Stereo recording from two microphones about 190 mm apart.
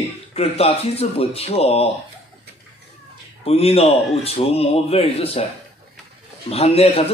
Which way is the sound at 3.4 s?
30° left (ahead or behind).